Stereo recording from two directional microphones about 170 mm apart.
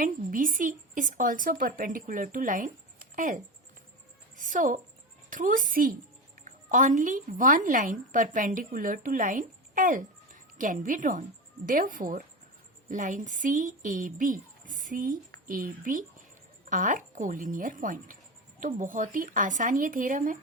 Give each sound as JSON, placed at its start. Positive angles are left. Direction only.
{"t": 0.0, "sound": "speech", "side_deg": -55}
{"t": 4.4, "sound": "music", "side_deg": -50}
{"t": 5.3, "sound": "a woman's voice", "side_deg": -50}